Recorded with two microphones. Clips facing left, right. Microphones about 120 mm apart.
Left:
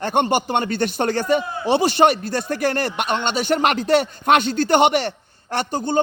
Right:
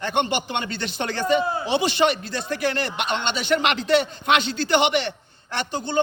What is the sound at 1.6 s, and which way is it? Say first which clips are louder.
Speech: left 9 dB; 50° left (ahead or behind).